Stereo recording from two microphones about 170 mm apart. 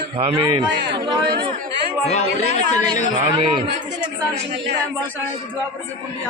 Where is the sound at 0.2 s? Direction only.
35° right (ahead or behind).